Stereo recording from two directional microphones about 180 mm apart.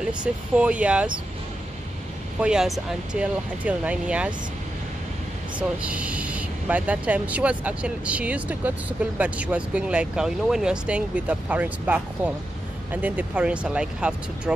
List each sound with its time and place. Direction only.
0.1 s speech: 5° right (ahead or behind)
2.4 s speech: 5° right (ahead or behind)
5.6 s speech: 5° right (ahead or behind)